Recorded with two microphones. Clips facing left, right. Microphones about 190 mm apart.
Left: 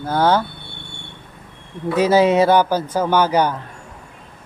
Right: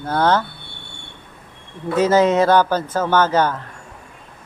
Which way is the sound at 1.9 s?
10° left (ahead or behind).